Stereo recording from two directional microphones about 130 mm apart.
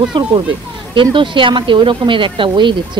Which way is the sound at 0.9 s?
40° right (ahead or behind).